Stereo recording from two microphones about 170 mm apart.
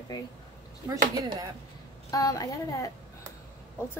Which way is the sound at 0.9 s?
20° right (ahead or behind).